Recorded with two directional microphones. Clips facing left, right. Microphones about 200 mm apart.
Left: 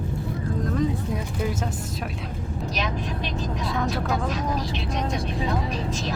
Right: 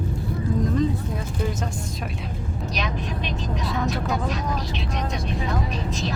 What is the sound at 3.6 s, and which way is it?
Speech, centre (ahead or behind).